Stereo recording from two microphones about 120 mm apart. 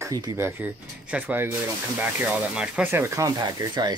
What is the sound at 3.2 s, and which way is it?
Speech, 30° right (ahead or behind).